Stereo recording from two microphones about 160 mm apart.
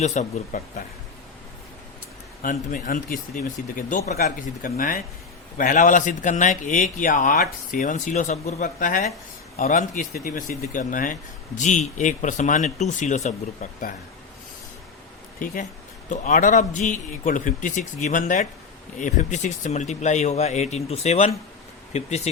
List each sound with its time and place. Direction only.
0.0 s speech: 45° left (ahead or behind)
2.4 s speech: 60° left (ahead or behind)
4.1 s speech: 65° left (ahead or behind); by 13.9 s 50° left (ahead or behind)
16.0 s speech: 55° left (ahead or behind)